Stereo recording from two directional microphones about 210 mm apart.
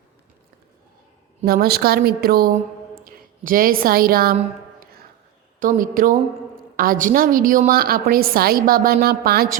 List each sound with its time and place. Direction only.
1.5 s a woman's voice: 50° right (ahead or behind)
5.5 s a woman's voice: 40° right (ahead or behind)